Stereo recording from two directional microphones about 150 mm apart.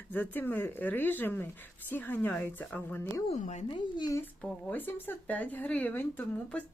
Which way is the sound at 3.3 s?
50° left (ahead or behind).